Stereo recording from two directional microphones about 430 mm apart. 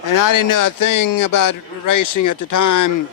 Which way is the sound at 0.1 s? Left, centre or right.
Left.